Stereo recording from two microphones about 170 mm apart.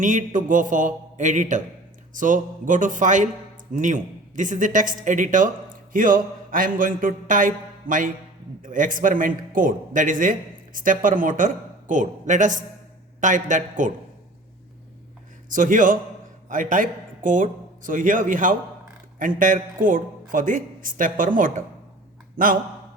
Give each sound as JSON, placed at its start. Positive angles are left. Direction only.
{"t": 0.0, "sound": "a man's voice", "side_deg": -45}
{"t": 15.4, "sound": "a man's voice", "side_deg": -50}